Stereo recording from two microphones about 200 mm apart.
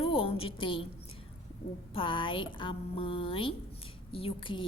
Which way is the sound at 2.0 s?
25° left (ahead or behind).